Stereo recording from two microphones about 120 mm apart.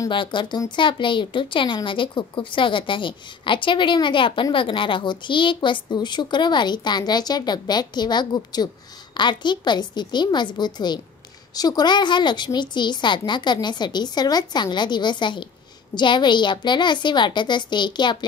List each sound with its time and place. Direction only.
0.1 s speech: 40° left (ahead or behind)